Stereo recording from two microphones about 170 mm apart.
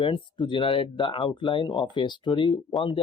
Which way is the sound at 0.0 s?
30° left (ahead or behind).